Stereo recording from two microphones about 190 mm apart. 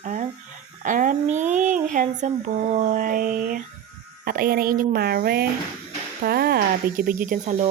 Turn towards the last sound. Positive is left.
turn(degrees=-40)  # may be behind; listen again after turning